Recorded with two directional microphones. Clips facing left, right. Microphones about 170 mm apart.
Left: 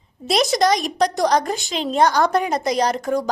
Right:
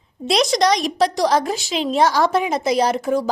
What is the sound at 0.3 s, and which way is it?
A woman's voice, centre (ahead or behind).